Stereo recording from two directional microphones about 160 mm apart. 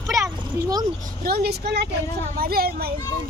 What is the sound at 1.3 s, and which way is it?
Speech, 75° right (ahead or behind).